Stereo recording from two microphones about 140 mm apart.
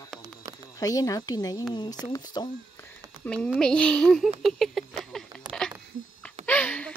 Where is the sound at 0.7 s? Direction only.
25° left (ahead or behind).